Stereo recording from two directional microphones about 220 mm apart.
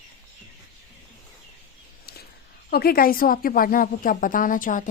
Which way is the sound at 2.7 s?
45° left (ahead or behind).